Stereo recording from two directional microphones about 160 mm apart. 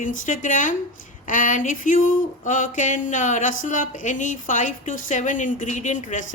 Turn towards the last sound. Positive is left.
turn(degrees=50)  # may be behind; listen again after turning